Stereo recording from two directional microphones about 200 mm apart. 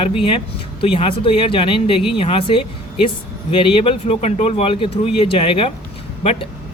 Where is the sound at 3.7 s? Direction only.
30° left (ahead or behind).